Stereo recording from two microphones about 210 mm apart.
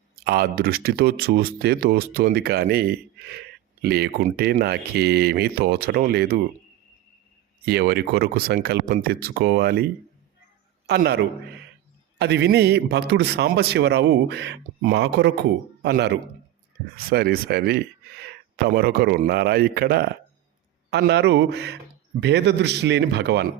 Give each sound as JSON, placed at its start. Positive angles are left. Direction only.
{"t": 0.3, "sound": "speech", "side_deg": -45}
{"t": 7.6, "sound": "speech", "side_deg": -50}
{"t": 12.2, "sound": "speech", "side_deg": -50}